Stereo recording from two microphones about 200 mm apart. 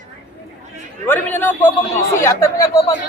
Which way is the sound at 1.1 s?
10° left (ahead or behind).